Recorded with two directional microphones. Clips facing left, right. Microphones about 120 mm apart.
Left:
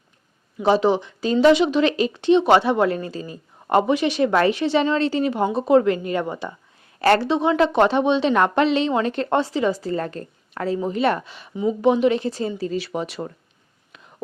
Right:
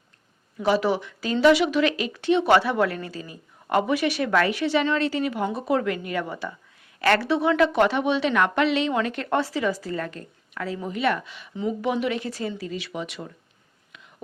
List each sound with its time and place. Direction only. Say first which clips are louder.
0.6 s speech: left 4 dB; 25° left (ahead or behind)
11.5 s speech: left 7 dB; 20° left (ahead or behind); by 13.3 s 40° left (ahead or behind)